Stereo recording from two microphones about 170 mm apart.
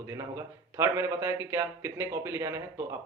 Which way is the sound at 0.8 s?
15° right (ahead or behind).